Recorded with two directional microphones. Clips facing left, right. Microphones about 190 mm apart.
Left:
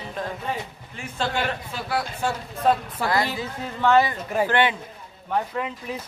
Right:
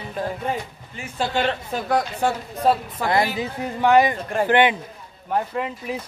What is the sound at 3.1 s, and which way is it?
Speech, 20° right (ahead or behind).